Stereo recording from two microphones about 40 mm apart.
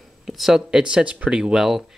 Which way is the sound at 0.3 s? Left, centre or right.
Centre.